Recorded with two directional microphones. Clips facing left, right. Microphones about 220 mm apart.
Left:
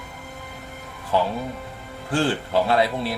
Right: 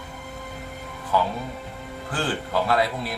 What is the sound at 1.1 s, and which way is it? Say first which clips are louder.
Speech: left 2 dB; 25° left (ahead or behind).